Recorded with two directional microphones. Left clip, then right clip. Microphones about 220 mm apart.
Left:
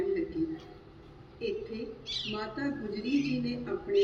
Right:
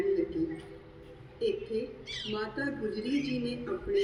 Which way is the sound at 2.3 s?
30° left (ahead or behind).